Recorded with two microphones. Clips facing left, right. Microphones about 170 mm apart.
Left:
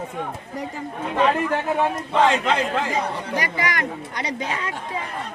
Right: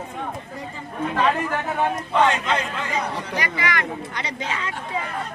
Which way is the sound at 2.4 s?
90° left.